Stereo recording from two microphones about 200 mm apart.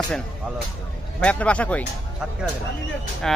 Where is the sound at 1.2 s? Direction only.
5° left (ahead or behind).